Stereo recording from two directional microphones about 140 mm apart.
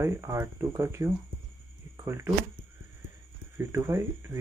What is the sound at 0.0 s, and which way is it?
Speech, 20° right (ahead or behind).